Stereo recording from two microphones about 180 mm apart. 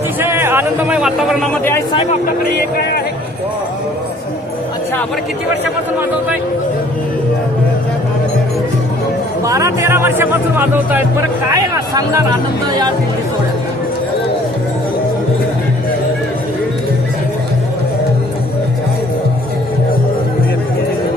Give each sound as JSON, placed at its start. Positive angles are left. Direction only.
{"t": 0.2, "sound": "a man's voice", "side_deg": -10}
{"t": 9.4, "sound": "speech", "side_deg": -15}